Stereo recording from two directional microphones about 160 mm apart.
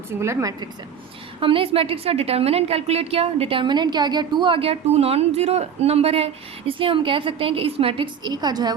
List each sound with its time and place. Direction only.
0.2 s speech: 15° right (ahead or behind)
1.4 s a woman's voice: 35° right (ahead or behind)